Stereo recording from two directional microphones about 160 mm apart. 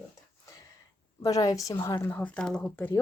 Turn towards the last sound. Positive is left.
turn(degrees=15)  # may be behind; listen again after turning